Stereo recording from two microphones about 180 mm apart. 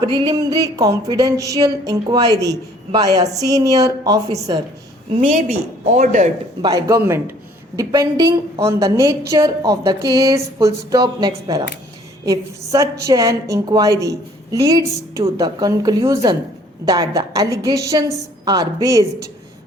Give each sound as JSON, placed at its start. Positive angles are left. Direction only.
{"t": 0.0, "sound": "a woman's voice", "side_deg": -20}
{"t": 5.5, "sound": "speech", "side_deg": -45}
{"t": 6.6, "sound": "a woman's voice", "side_deg": -20}